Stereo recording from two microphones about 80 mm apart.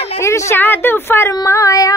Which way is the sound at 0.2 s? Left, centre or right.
Left.